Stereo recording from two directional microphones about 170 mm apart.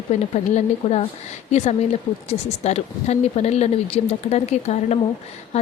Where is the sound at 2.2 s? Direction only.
40° left (ahead or behind).